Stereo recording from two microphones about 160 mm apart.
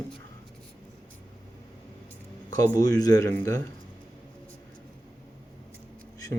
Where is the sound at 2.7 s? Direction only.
20° left (ahead or behind).